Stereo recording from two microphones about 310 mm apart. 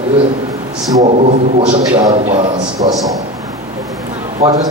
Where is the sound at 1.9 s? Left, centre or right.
Centre.